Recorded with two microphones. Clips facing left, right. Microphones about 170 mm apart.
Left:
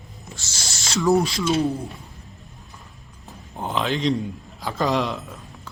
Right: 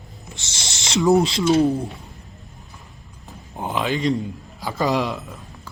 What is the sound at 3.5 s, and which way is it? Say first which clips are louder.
Speech: right 1 dB; 15° right (ahead or behind).